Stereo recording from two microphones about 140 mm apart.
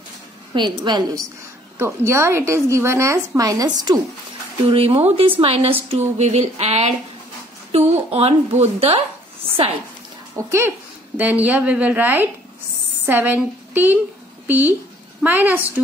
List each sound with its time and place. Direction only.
0.5 s a woman's voice: 35° right (ahead or behind)
1.8 s a woman's voice: 20° right (ahead or behind)
4.6 s a woman's voice: 45° right (ahead or behind)
10.3 s a woman's voice: 20° right (ahead or behind)